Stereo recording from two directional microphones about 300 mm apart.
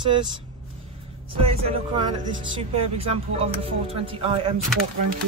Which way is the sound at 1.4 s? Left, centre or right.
Centre.